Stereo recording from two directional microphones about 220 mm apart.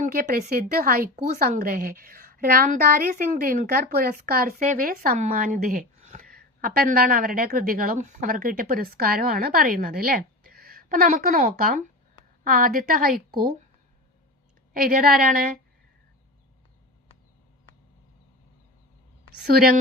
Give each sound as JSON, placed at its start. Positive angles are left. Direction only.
{"t": 0.0, "sound": "a woman's voice", "side_deg": -40}
{"t": 1.4, "sound": "a woman's voice", "side_deg": -40}
{"t": 14.7, "sound": "a woman's voice", "side_deg": -40}
{"t": 19.4, "sound": "a woman's voice", "side_deg": -45}